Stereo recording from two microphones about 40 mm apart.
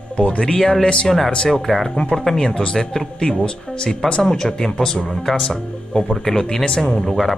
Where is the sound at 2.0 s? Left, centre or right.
Left.